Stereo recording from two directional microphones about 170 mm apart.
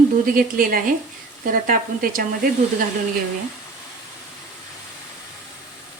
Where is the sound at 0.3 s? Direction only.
60° right (ahead or behind).